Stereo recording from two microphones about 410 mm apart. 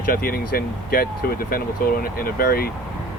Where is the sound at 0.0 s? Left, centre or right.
Left.